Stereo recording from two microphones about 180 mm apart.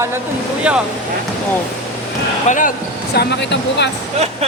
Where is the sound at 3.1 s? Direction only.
70° left (ahead or behind).